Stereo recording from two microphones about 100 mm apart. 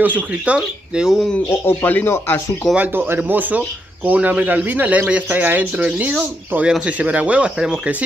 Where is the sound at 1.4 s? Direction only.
25° left (ahead or behind).